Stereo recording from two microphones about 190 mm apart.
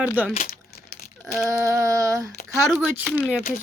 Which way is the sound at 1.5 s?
15° right (ahead or behind).